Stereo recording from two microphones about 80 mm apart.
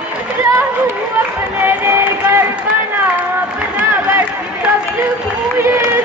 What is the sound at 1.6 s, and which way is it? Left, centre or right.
Music, right.